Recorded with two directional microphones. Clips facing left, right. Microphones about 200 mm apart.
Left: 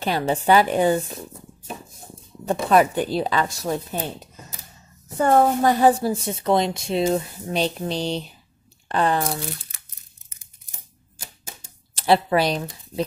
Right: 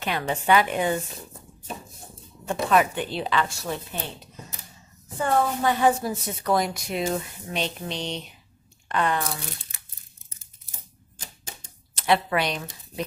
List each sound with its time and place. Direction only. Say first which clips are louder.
0.0 s a woman's voice: left 5 dB; 35° left (ahead or behind)
2.4 s a woman's voice: left 4 dB; 35° left (ahead or behind)
5.1 s a woman's voice: left 6 dB; 45° left (ahead or behind)
11.1 s typewriter: left 1 dB; 10° left (ahead or behind)
11.9 s speech: left 4 dB; 30° left (ahead or behind)